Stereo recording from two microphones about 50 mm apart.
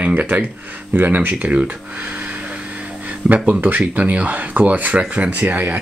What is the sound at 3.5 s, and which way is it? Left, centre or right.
Speech, right.